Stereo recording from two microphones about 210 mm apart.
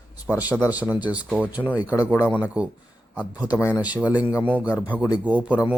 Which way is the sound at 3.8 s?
5° right (ahead or behind).